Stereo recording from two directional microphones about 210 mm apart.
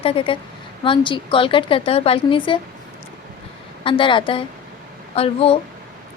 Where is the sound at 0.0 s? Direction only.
25° left (ahead or behind).